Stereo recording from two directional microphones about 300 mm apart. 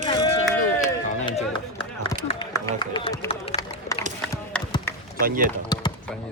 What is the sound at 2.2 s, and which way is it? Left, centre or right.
Run, centre.